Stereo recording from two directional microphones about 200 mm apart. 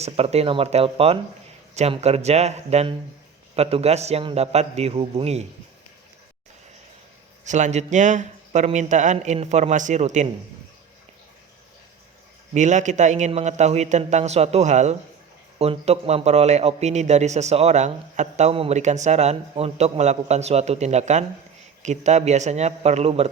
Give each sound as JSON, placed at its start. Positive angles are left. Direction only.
{"t": 0.0, "sound": "a man's voice", "side_deg": -30}
{"t": 7.4, "sound": "a man's voice", "side_deg": -35}
{"t": 12.5, "sound": "a man's voice", "side_deg": -35}